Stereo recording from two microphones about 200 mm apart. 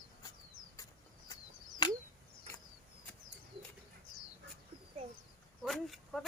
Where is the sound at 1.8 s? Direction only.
20° left (ahead or behind).